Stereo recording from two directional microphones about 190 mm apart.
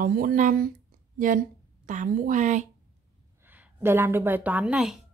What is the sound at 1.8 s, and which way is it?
Speech, 40° right (ahead or behind).